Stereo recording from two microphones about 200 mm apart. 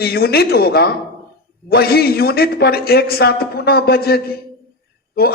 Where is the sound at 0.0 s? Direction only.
50° left (ahead or behind).